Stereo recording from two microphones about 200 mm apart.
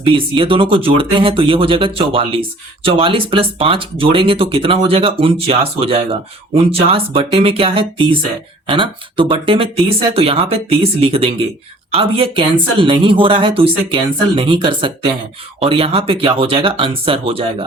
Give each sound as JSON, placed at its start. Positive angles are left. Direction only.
{"t": 0.0, "sound": "speech", "side_deg": -25}